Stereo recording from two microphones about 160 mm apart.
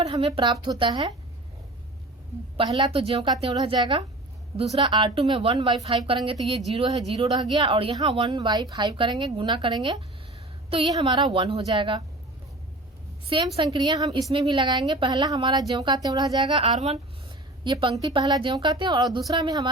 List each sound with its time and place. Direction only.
0.0 s a woman's voice: 35° right (ahead or behind)
2.6 s a woman's voice: 30° right (ahead or behind)
13.3 s a woman's voice: 30° right (ahead or behind)